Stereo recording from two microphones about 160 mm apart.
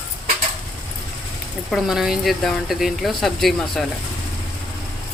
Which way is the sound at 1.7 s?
Centre (ahead or behind).